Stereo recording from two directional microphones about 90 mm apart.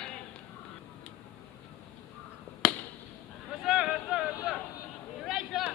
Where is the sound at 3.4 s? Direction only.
Centre (ahead or behind).